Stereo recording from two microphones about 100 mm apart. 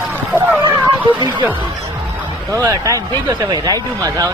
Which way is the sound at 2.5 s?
30° right (ahead or behind).